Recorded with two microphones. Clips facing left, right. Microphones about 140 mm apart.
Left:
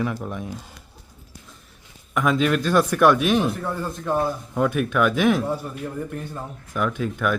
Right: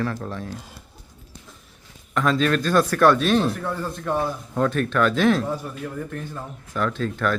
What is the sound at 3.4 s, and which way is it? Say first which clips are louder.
Speech: even; centre (ahead or behind).